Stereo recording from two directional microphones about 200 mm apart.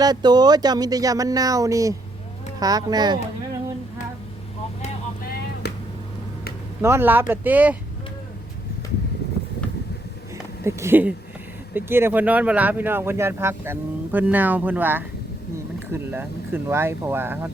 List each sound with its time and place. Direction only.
0.0 s speech: 20° right (ahead or behind)
5.6 s a sound: 55° left (ahead or behind)
6.8 s speech: 10° right (ahead or behind)
10.6 s speech: 15° right (ahead or behind)